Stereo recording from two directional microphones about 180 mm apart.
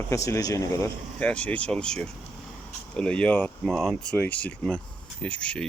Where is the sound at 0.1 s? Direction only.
15° left (ahead or behind).